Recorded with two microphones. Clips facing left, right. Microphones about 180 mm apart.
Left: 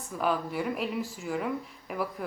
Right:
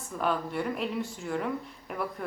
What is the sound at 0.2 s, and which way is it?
A woman's voice, 5° left (ahead or behind).